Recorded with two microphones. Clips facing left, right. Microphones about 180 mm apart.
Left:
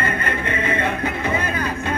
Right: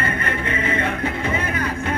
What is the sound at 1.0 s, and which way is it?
Vehicle, 30° right (ahead or behind).